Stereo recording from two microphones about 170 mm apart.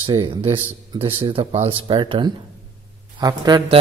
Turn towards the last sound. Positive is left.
turn(degrees=-25)  # may be behind; listen again after turning